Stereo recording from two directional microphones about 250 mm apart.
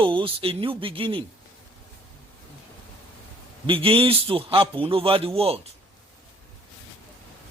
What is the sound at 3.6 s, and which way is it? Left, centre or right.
Speech, centre.